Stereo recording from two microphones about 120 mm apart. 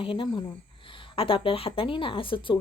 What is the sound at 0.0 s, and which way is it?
Speech, 45° left (ahead or behind).